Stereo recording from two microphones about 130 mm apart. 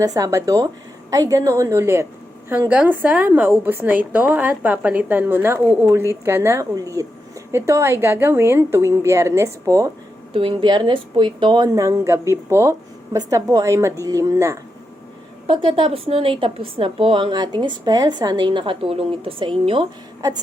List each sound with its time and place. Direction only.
0.0 s a woman's voice: 25° right (ahead or behind)
10.3 s a woman's voice: 40° right (ahead or behind); by 14.6 s 25° right (ahead or behind)
15.4 s a woman's voice: 40° right (ahead or behind)